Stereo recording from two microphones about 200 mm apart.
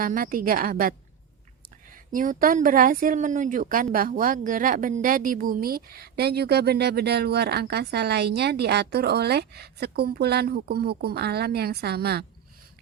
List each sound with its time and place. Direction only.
0.0 s speech: 45° right (ahead or behind)
2.1 s speech: 45° right (ahead or behind)